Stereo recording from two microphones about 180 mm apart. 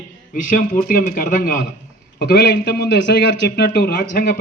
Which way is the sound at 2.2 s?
65° left (ahead or behind).